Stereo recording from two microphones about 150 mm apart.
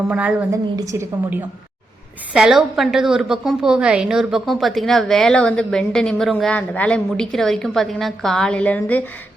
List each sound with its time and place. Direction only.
0.1 s a woman's voice: 10° right (ahead or behind)
0.5 s a woman's voice: 20° right (ahead or behind)
2.3 s a woman's voice: 5° right (ahead or behind)